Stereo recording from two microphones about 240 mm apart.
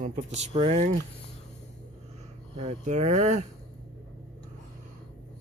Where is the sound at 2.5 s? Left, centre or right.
Right.